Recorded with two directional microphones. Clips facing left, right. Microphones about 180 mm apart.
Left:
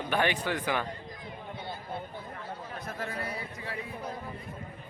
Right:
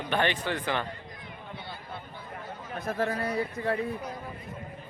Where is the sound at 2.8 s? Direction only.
50° right (ahead or behind).